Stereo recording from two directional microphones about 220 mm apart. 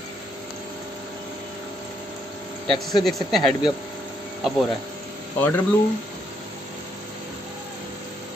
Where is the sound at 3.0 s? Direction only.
Centre (ahead or behind).